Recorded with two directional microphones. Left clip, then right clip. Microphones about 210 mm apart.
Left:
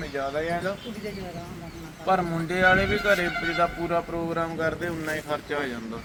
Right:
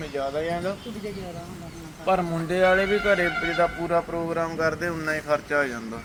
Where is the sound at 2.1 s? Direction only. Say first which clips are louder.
Right 1 dB; 20° right (ahead or behind).